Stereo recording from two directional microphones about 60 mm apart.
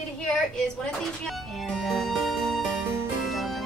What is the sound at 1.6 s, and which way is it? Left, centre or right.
Music, centre.